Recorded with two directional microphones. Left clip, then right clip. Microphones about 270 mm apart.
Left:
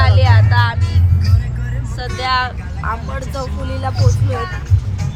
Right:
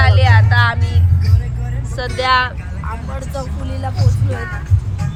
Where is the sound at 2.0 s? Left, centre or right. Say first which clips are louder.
Right 3 dB; centre.